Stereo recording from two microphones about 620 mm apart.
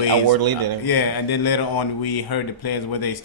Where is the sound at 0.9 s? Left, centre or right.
Left.